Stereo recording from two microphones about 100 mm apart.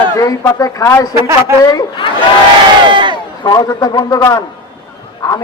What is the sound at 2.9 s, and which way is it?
Speech, 50° right (ahead or behind).